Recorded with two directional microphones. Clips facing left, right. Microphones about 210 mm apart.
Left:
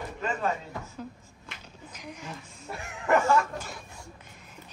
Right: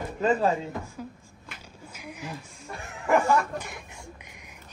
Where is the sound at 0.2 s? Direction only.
35° right (ahead or behind).